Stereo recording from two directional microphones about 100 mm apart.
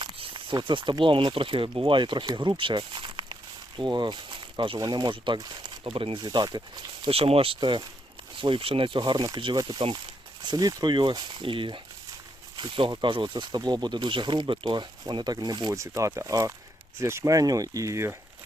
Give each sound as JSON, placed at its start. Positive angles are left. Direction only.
{"t": 0.0, "sound": "speech", "side_deg": -55}
{"t": 4.8, "sound": "speech", "side_deg": -45}
{"t": 7.1, "sound": "speech", "side_deg": -75}
{"t": 10.4, "sound": "speech", "side_deg": -40}
{"t": 15.7, "sound": "speech", "side_deg": -30}